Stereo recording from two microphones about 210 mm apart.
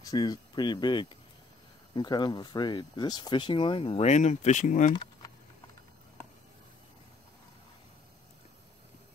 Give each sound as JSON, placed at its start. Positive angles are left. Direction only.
{"t": 0.0, "sound": "speech", "side_deg": 20}